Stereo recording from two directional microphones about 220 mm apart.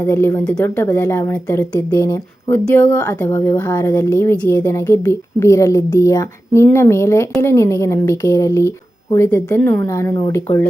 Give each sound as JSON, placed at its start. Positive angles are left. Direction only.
{"t": 0.0, "sound": "a woman's voice", "side_deg": 10}